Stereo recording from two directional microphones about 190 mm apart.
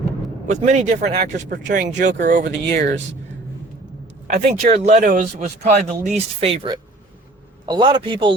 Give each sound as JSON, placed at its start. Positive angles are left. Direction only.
{"t": 0.4, "sound": "speech", "side_deg": -40}
{"t": 4.3, "sound": "a man's voice", "side_deg": -35}